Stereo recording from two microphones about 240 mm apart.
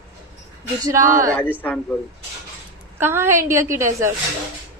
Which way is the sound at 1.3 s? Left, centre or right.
Centre.